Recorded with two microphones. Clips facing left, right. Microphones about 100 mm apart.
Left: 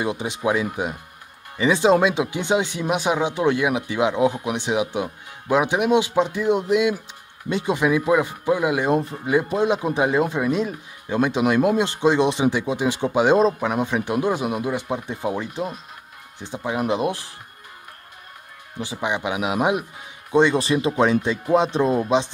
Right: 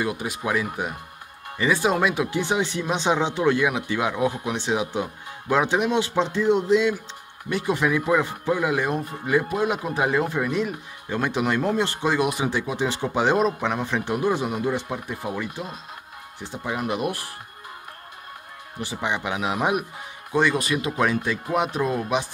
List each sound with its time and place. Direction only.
0.0 s speech: 25° left (ahead or behind)
18.8 s speech: 20° left (ahead or behind)